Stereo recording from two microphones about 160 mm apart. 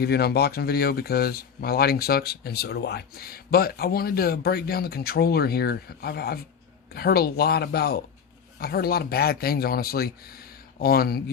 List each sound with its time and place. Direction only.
0.0 s speech: 80° left